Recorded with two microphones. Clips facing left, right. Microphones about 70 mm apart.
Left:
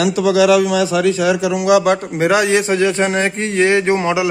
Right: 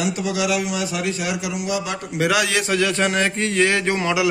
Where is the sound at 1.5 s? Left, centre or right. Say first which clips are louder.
Left 14 dB; left.